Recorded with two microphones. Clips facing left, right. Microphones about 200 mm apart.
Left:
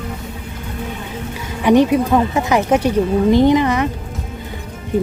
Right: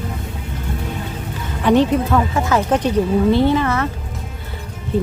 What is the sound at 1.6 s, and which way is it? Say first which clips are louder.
Speech: left 2 dB; 15° left (ahead or behind).